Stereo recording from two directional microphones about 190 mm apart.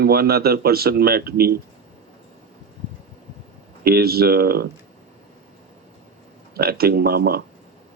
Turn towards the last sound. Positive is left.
turn(degrees=-55)  # may be behind; listen again after turning